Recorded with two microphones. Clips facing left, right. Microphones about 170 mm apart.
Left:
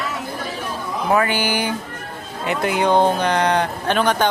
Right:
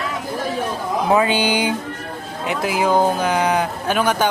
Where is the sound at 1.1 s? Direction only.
15° right (ahead or behind).